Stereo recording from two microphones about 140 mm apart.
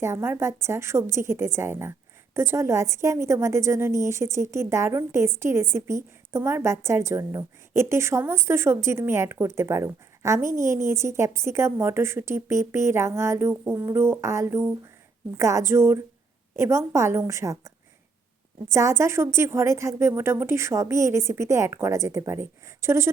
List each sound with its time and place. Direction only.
0.0 s a woman's voice: 20° right (ahead or behind)
18.7 s a woman's voice: 20° right (ahead or behind)